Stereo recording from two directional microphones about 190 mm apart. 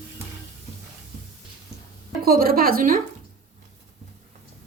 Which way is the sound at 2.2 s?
50° right (ahead or behind).